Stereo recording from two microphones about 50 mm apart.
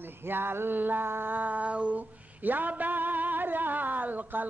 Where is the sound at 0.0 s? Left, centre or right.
Right.